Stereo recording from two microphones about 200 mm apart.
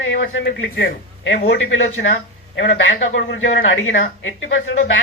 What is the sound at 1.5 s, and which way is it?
Speech, 70° left (ahead or behind).